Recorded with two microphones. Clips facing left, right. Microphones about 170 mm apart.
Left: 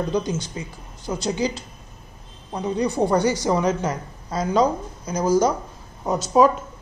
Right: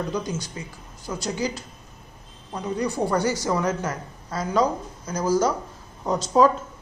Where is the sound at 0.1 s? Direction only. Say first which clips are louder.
Left 4 dB; 20° left (ahead or behind).